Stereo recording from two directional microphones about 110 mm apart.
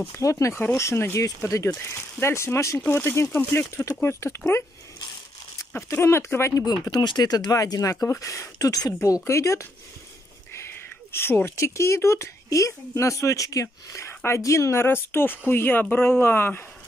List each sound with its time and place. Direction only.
0.2 s speech: 30° left (ahead or behind)
5.9 s speech: 25° left (ahead or behind)
6.6 s speech: 40° left (ahead or behind); by 16.6 s 20° left (ahead or behind)